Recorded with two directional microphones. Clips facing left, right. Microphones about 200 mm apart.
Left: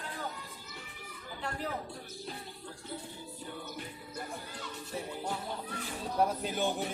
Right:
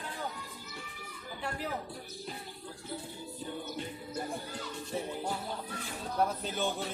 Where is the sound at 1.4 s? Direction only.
5° right (ahead or behind).